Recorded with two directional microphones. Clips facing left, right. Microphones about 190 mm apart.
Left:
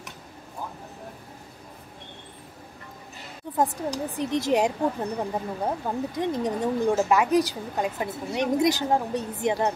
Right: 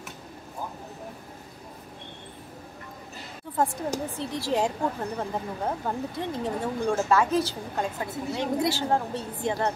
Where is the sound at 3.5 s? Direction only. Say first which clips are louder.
Left 1 dB; 20° left (ahead or behind).